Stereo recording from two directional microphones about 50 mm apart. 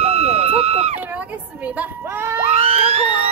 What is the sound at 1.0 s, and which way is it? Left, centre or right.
Speech, right.